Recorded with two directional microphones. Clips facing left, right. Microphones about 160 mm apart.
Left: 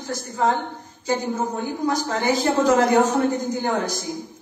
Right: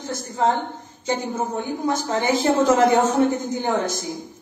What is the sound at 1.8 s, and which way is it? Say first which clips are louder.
A woman's voice: even; 25° right (ahead or behind).